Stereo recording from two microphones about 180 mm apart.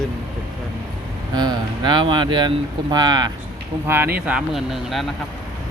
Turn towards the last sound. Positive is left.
turn(degrees=0)  # may be behind; listen again after turning